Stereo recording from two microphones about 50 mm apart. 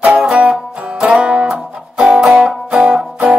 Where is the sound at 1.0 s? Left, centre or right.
Right.